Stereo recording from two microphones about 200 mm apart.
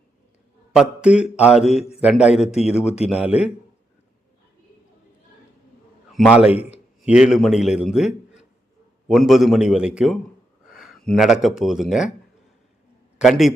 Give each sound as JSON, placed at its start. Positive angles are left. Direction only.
{"t": 0.8, "sound": "a man's voice", "side_deg": -5}
{"t": 2.8, "sound": "a man's voice", "side_deg": 30}
{"t": 3.1, "sound": "a man's voice", "side_deg": -5}
{"t": 6.1, "sound": "a man's voice", "side_deg": -5}
{"t": 13.1, "sound": "a man's voice", "side_deg": 0}